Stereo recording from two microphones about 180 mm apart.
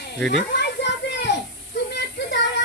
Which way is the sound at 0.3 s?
75° left (ahead or behind).